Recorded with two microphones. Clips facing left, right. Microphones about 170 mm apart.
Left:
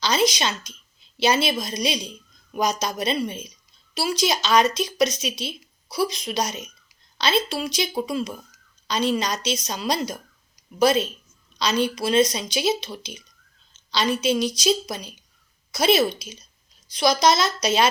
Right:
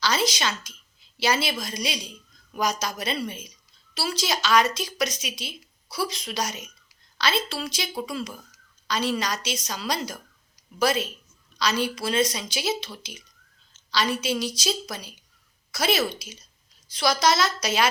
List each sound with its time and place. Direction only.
0.0 s a woman's voice: 20° left (ahead or behind)